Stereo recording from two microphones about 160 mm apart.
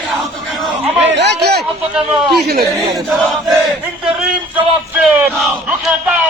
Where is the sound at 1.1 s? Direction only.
90° right.